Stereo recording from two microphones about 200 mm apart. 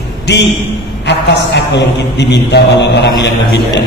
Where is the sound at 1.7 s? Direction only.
60° left (ahead or behind).